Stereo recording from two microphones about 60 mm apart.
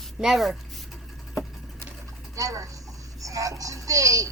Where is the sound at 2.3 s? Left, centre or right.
Right.